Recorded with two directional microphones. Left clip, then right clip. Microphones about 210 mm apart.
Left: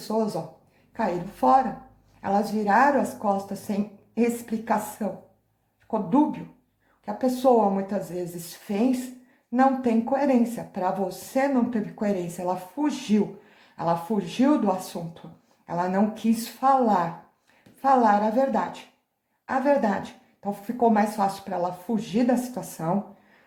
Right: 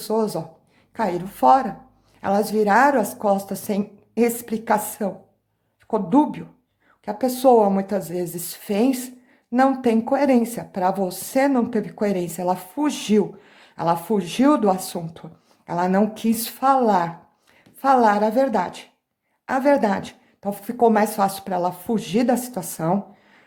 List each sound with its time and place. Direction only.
0.0 s speech: 45° right (ahead or behind)